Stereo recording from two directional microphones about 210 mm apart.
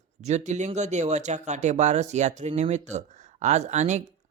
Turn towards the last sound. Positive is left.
turn(degrees=-35)  # may be behind; listen again after turning